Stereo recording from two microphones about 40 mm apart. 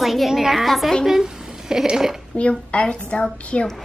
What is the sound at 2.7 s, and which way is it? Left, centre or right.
Speech, left.